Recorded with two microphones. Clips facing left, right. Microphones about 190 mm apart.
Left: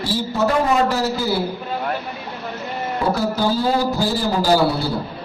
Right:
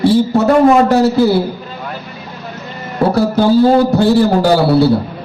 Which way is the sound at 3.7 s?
65° right (ahead or behind).